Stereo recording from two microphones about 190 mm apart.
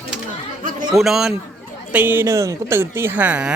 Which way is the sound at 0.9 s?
Centre (ahead or behind).